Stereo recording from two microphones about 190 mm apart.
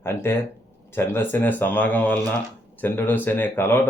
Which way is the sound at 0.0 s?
10° left (ahead or behind).